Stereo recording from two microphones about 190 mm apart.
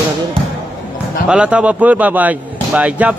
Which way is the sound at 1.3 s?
5° right (ahead or behind).